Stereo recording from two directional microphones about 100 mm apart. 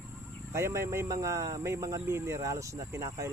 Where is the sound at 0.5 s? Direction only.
30° right (ahead or behind).